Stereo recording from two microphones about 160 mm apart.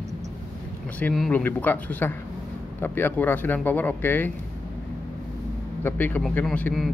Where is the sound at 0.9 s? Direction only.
5° left (ahead or behind).